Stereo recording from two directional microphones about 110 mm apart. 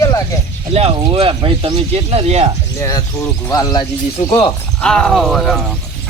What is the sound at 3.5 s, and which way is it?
Speech, 35° left (ahead or behind).